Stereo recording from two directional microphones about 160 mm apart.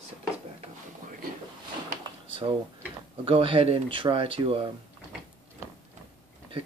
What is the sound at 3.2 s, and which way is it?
Speech, 35° right (ahead or behind).